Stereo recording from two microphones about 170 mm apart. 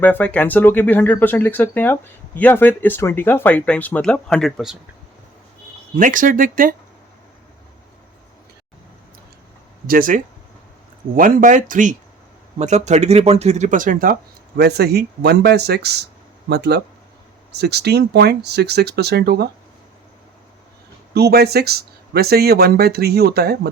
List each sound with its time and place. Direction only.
0.0 s speech: 10° left (ahead or behind)
6.0 s speech: 50° right (ahead or behind)
9.8 s speech: 55° right (ahead or behind)
21.1 s speech: 70° right (ahead or behind)